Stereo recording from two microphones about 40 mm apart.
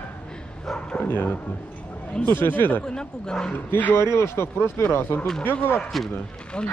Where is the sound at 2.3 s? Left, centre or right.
Left.